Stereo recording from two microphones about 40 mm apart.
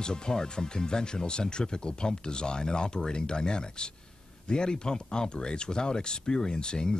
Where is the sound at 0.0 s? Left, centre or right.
Centre.